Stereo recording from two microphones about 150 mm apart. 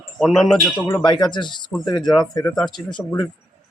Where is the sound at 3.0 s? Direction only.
15° left (ahead or behind).